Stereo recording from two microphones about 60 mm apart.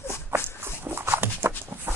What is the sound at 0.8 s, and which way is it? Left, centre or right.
Dog, right.